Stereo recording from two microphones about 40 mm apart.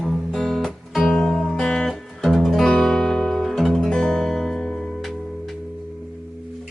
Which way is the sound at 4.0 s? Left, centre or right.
Centre.